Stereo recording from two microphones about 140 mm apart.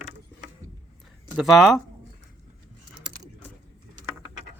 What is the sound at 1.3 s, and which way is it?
Speech, centre (ahead or behind).